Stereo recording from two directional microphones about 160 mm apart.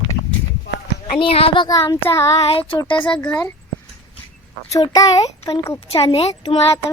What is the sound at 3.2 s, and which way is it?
Speech, 10° left (ahead or behind).